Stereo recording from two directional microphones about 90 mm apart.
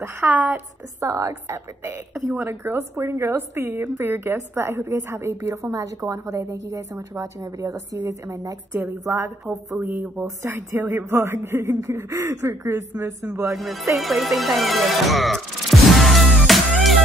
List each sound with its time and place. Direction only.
0.0 s speech: 25° right (ahead or behind)
1.0 s a woman's voice: 35° right (ahead or behind)
13.5 s music: centre (ahead or behind)